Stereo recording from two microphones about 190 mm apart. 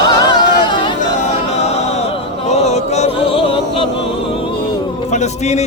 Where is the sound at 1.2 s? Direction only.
35° left (ahead or behind).